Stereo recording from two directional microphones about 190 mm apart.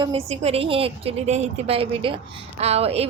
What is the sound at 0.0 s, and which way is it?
A woman's voice, 30° right (ahead or behind).